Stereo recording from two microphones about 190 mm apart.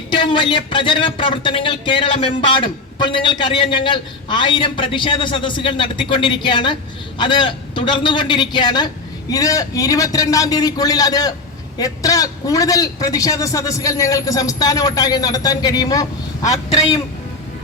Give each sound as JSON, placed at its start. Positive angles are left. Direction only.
{"t": 0.1, "sound": "a man's voice", "side_deg": 25}